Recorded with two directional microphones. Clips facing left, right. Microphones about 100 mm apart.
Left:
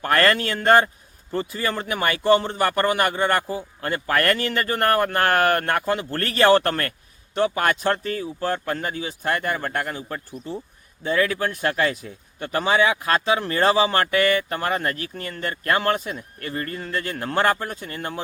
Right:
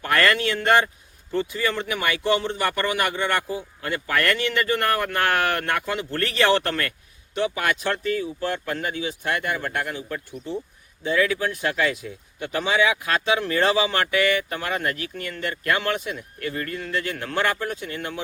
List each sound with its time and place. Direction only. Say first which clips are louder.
0.0 s speech: left 1 dB; 40° left (ahead or behind)